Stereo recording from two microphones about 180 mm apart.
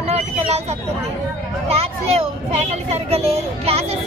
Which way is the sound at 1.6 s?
35° right (ahead or behind).